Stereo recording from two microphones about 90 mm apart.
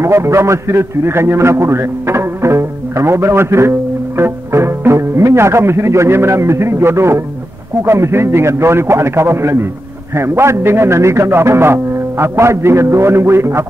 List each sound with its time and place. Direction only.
0.0 s a man's voice: 30° right (ahead or behind)